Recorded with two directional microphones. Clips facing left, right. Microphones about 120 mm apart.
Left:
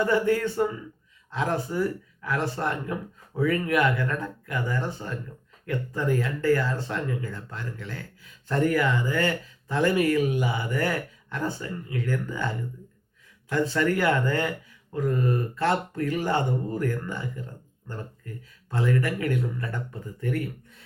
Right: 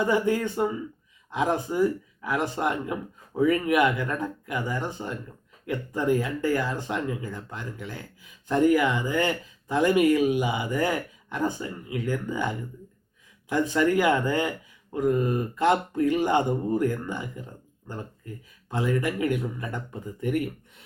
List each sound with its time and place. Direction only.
0.0 s speech: 15° right (ahead or behind)